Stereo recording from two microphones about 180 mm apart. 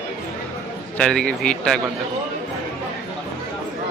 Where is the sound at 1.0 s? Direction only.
5° left (ahead or behind).